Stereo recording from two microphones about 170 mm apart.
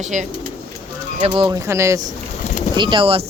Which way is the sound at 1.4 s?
20° right (ahead or behind).